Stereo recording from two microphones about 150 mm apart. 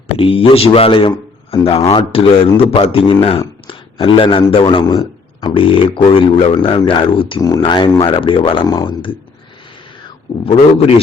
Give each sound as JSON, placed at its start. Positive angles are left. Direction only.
{"t": 0.2, "sound": "speech", "side_deg": 35}
{"t": 10.4, "sound": "speech", "side_deg": 40}